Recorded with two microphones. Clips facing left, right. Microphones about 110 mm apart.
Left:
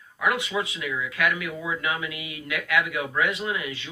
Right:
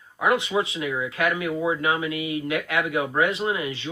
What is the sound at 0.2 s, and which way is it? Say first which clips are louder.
Speech: right 4 dB; 30° right (ahead or behind).